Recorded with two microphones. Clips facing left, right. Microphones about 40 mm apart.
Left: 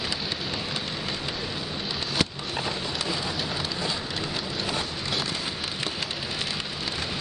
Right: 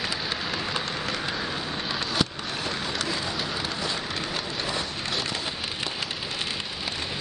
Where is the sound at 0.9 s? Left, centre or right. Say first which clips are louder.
Right 2 dB; right.